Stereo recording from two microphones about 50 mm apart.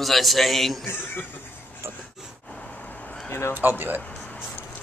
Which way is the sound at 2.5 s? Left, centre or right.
Left.